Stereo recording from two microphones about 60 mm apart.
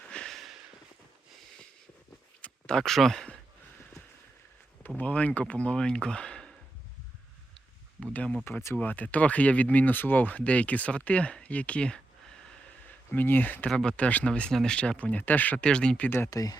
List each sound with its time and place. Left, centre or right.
0.3 s a sound: centre
2.4 s speech: centre
4.9 s speech: left
8.1 s speech: left
13.1 s speech: left
13.7 s speech: centre
14.5 s speech: centre
14.8 s speech: left
15.5 s speech: centre
16.0 s speech: left
16.3 s speech: left